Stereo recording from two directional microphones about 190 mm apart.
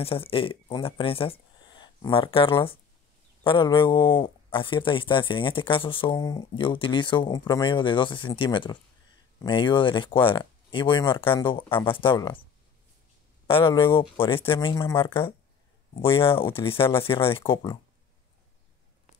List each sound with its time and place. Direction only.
0.0 s speech: 30° left (ahead or behind)
13.5 s speech: 30° left (ahead or behind)